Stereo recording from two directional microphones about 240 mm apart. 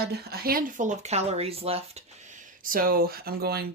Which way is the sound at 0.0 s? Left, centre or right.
Right.